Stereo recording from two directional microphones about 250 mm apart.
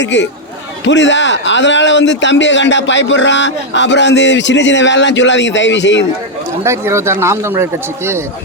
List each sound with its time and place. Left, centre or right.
0.0 s speech: left
6.7 s speech: centre